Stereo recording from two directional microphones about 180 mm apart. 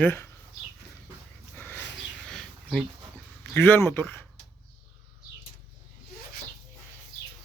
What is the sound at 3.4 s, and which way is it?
Speech, 10° left (ahead or behind).